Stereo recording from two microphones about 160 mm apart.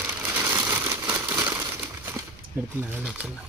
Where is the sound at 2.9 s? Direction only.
10° right (ahead or behind).